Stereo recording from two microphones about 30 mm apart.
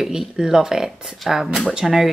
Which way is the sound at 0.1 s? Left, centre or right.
Right.